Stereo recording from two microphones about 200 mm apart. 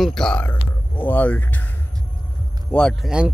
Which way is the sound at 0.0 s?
5° left (ahead or behind).